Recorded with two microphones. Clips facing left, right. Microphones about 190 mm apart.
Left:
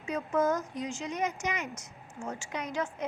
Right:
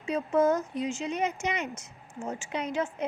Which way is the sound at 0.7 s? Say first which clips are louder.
Right 4 dB; 15° left (ahead or behind).